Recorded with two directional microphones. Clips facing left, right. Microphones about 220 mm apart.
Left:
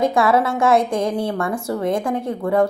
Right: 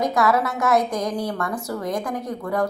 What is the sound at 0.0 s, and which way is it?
Speech, 30° left (ahead or behind).